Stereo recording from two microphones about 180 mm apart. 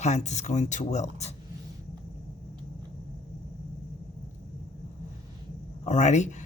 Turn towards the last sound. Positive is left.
turn(degrees=40)  # may be behind; listen again after turning